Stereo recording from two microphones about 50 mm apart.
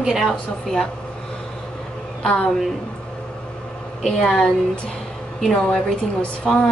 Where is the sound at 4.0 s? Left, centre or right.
Centre.